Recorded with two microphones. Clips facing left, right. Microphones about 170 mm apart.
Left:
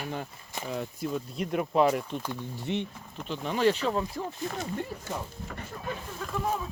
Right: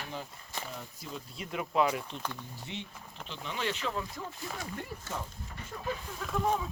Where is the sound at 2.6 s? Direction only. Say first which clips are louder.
Left 12 dB; 60° left (ahead or behind).